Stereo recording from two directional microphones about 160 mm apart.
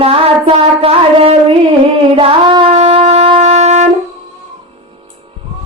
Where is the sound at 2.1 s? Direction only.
35° right (ahead or behind).